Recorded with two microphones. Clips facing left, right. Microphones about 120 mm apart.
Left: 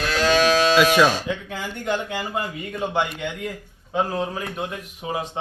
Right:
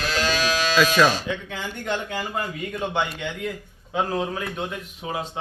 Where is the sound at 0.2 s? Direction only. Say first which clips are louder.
Left 7 dB; 60° left (ahead or behind).